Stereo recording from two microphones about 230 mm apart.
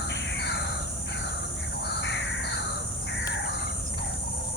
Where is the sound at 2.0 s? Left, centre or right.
Left.